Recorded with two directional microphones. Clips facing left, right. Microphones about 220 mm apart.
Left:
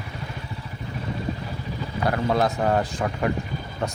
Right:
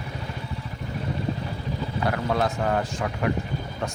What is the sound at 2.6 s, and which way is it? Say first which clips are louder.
Speech: left 3 dB; 35° left (ahead or behind).